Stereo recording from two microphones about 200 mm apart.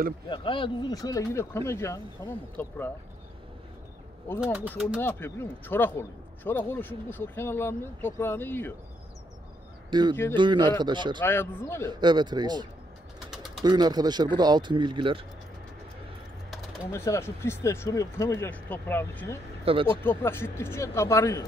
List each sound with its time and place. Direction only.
0.3 s speech: 25° left (ahead or behind)
4.4 s speech: 5° right (ahead or behind)
5.0 s speech: 10° left (ahead or behind)
9.8 s speech: 20° right (ahead or behind)
11.2 s speech: 10° left (ahead or behind)
11.9 s speech: 20° right (ahead or behind)
13.3 s bird: centre (ahead or behind)
13.7 s speech: 20° right (ahead or behind)
16.9 s speech: 15° left (ahead or behind)
19.6 s speech: 25° right (ahead or behind)
19.9 s speech: 10° left (ahead or behind)